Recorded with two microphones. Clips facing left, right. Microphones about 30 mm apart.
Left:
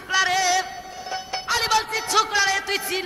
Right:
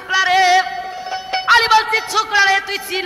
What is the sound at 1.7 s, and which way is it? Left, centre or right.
Speech, right.